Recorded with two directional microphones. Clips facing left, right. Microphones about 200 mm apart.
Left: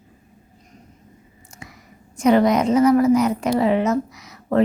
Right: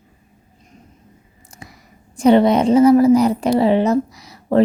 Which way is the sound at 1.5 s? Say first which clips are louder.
Right 1 dB; 35° right (ahead or behind).